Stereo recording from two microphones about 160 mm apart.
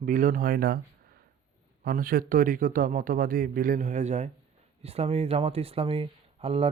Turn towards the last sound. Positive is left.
turn(degrees=-35)  # may be behind; listen again after turning